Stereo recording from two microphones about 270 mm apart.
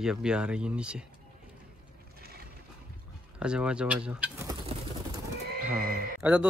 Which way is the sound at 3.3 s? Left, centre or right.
Centre.